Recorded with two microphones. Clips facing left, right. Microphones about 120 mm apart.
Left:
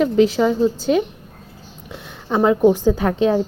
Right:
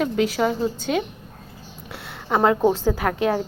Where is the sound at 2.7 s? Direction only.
20° left (ahead or behind).